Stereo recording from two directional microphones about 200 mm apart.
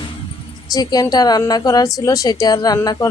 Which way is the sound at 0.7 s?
20° left (ahead or behind).